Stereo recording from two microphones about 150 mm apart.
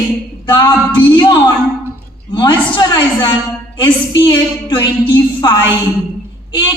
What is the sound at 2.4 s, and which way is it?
A woman's voice, 30° left (ahead or behind).